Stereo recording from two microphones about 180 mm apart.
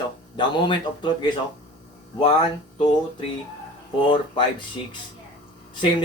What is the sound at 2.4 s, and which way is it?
Speech, 25° left (ahead or behind).